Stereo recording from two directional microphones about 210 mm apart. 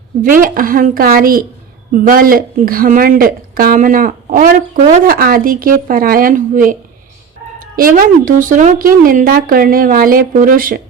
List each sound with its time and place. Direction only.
0.2 s speech: 40° right (ahead or behind)
7.8 s speech: 40° right (ahead or behind)